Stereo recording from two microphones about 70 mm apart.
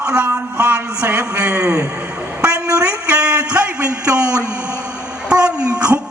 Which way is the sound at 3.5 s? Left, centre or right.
Centre.